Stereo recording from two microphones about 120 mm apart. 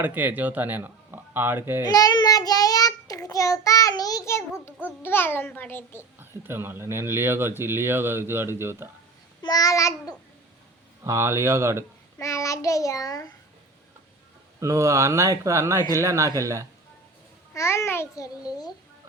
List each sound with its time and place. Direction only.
0.0 s speech: 15° right (ahead or behind)
1.8 s child singing: 30° left (ahead or behind)
5.0 s a child's voice: 20° left (ahead or behind)
6.1 s speech: 20° right (ahead or behind)
9.4 s babbling: 30° left (ahead or behind)
11.0 s speech: 25° right (ahead or behind)
12.2 s child singing: 25° left (ahead or behind)
14.6 s speech: 25° right (ahead or behind)
17.5 s child singing: 25° left (ahead or behind)